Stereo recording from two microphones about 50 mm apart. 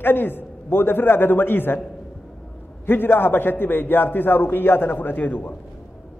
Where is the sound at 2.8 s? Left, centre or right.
Left.